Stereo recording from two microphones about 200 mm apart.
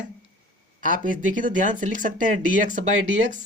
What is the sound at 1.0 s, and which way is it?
Speech, 40° right (ahead or behind).